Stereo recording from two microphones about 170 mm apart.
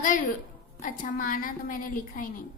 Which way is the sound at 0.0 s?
50° left (ahead or behind).